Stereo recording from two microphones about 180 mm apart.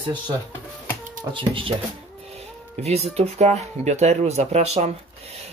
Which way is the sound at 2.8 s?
35° right (ahead or behind).